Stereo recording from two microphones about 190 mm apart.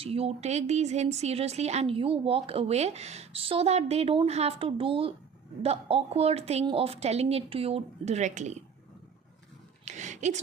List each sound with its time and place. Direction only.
0.0 s speech: 30° right (ahead or behind)
9.8 s speech: 40° right (ahead or behind)